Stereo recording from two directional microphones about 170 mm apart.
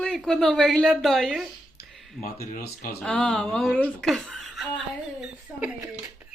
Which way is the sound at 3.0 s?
5° left (ahead or behind).